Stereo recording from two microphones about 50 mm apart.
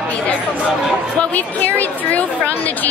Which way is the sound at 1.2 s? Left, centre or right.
Left.